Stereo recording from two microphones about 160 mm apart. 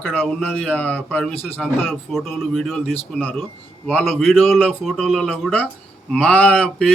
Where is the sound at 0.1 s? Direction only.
5° left (ahead or behind).